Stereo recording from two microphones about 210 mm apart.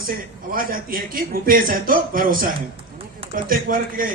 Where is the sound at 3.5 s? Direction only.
40° right (ahead or behind).